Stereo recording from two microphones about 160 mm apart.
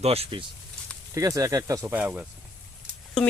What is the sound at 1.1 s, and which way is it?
Speech, 20° right (ahead or behind).